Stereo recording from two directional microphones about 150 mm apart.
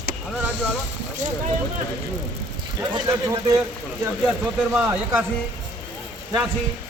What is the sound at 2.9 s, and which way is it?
Speech, 25° right (ahead or behind).